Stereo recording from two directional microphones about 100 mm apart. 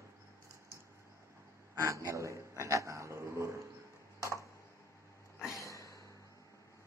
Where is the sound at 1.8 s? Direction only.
30° right (ahead or behind).